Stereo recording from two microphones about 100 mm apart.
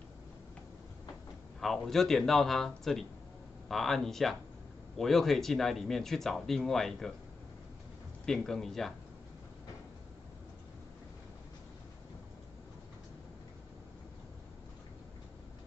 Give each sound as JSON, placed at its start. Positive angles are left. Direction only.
{"t": 1.6, "sound": "speech", "side_deg": 5}
{"t": 8.3, "sound": "speech", "side_deg": 5}